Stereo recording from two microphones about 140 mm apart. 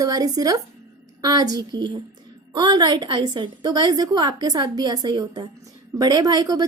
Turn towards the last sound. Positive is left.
turn(degrees=-25)  # may be behind; listen again after turning